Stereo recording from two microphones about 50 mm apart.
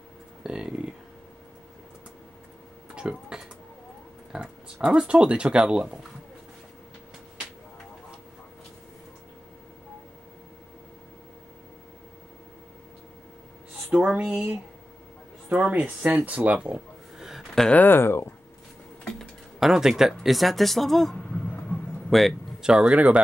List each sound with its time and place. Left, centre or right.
0.4 s a sound: centre
2.9 s a sound: centre
4.3 s oink: centre
4.8 s speech: right
14.0 s speech: right
15.5 s speech: right
16.3 s a sound: right; by 17.5 s centre
17.8 s speech: left
19.6 s speech: centre
21.7 s a sound: left
22.1 s speech: centre
22.6 s speech: centre
22.8 s speech: right